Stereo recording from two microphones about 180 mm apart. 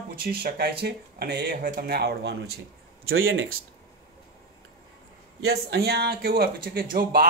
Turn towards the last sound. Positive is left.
turn(degrees=-55)  # may be behind; listen again after turning